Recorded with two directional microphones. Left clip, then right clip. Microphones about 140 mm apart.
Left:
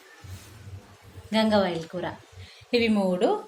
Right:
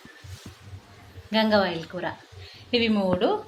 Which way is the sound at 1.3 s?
20° left (ahead or behind).